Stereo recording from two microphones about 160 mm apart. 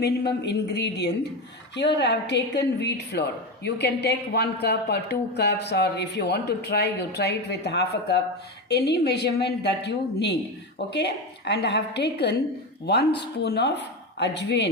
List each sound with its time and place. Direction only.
0.0 s a woman's voice: 90° left